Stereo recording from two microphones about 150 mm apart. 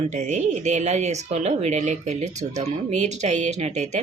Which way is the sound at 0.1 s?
50° right (ahead or behind).